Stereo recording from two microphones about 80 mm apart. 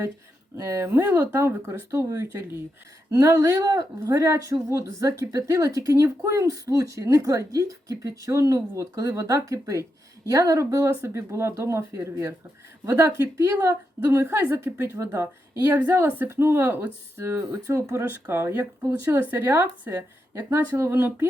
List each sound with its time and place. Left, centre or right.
0.5 s speech: right
3.1 s a woman's voice: right
20.3 s speech: right